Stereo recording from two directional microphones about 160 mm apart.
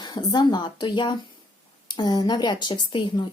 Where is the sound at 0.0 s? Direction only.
25° left (ahead or behind).